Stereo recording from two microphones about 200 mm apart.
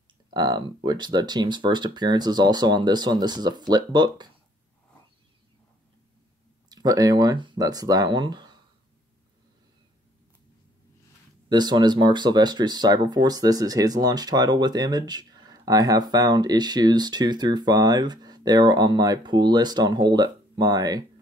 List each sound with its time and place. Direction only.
0.3 s speech: 20° right (ahead or behind)
6.7 s speech: 20° right (ahead or behind)
11.4 s speech: 20° right (ahead or behind)